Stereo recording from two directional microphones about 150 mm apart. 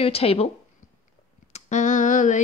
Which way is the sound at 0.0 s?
40° left (ahead or behind).